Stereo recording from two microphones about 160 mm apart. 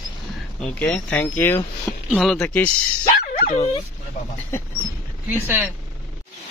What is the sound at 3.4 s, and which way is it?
Speech, 45° left (ahead or behind).